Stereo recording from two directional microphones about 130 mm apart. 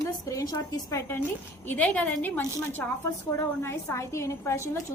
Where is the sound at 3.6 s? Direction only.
20° left (ahead or behind).